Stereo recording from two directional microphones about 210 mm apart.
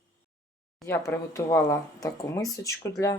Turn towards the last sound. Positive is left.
turn(degrees=15)  # may be behind; listen again after turning